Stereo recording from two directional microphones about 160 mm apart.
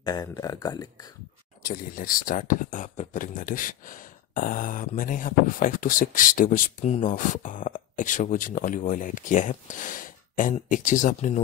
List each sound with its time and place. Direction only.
0.0 s speech: 25° left (ahead or behind)
1.6 s speech: 65° left (ahead or behind)